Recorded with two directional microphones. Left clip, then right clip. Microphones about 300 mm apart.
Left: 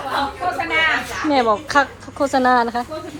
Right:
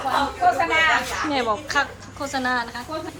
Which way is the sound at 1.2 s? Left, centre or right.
Centre.